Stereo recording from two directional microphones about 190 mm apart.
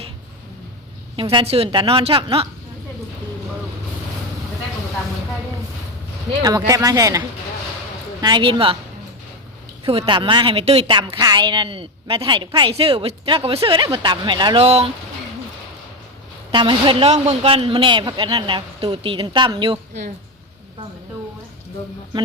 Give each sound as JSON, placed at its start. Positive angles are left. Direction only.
{"t": 1.1, "sound": "a woman's voice", "side_deg": -25}
{"t": 6.4, "sound": "a woman's voice", "side_deg": -20}
{"t": 10.0, "sound": "a woman's voice", "side_deg": -25}
{"t": 14.6, "sound": "speech", "side_deg": -35}
{"t": 16.5, "sound": "a woman's voice", "side_deg": -25}